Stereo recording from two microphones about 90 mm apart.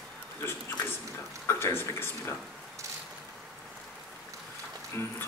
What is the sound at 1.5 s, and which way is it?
Speech, 25° left (ahead or behind).